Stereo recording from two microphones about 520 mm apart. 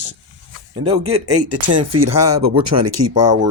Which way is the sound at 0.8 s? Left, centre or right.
Right.